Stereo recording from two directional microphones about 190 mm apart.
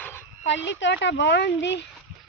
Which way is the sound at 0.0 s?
10° left (ahead or behind).